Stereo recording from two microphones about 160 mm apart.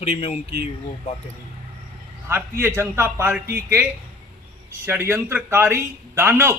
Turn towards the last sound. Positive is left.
turn(degrees=-15)  # may be behind; listen again after turning